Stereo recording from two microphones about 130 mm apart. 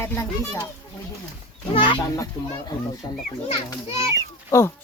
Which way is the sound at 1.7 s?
40° left (ahead or behind).